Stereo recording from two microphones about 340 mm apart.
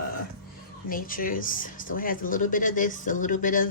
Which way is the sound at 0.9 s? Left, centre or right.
Left.